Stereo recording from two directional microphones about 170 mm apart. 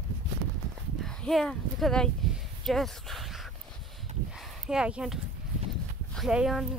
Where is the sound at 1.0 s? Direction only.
Centre (ahead or behind).